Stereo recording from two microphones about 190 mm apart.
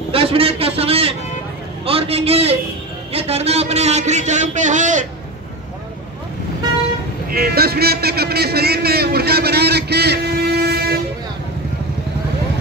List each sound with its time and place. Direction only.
0.1 s a man's voice: 30° right (ahead or behind)
7.2 s a man's voice: 50° right (ahead or behind)